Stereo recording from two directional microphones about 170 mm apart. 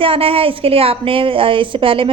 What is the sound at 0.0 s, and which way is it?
A woman's voice, 35° right (ahead or behind).